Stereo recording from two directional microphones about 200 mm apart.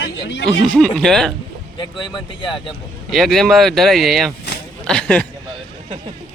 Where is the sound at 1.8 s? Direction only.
25° left (ahead or behind).